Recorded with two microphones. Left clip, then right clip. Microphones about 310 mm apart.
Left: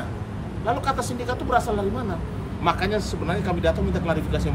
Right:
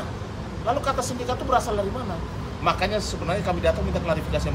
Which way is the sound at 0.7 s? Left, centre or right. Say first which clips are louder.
Even; centre.